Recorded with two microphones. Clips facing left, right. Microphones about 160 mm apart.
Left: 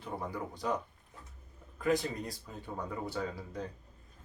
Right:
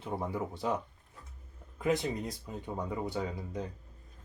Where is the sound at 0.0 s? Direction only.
25° right (ahead or behind).